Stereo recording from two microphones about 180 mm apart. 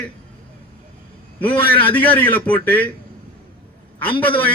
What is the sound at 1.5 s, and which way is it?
Speech, 30° left (ahead or behind).